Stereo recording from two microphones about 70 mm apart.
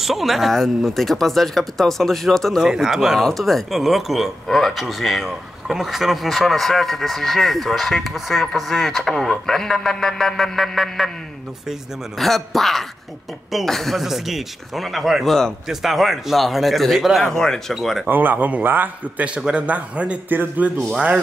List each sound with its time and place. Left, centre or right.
0.0 s speech: centre
12.2 s speech: centre
18.0 s a man's voice: right